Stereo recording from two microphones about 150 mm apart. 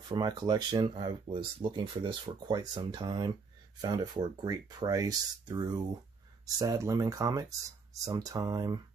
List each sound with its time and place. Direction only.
0.1 s speech: 25° right (ahead or behind)